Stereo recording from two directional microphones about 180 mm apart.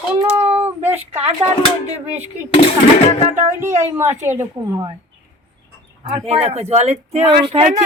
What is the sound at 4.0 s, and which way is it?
Speech, 10° right (ahead or behind).